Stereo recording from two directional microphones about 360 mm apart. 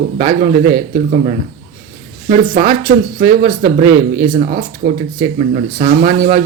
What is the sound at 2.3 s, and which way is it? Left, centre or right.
Speech, right.